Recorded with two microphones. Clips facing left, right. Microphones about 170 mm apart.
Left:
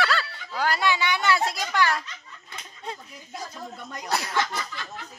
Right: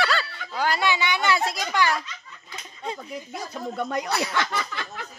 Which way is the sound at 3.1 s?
75° right (ahead or behind).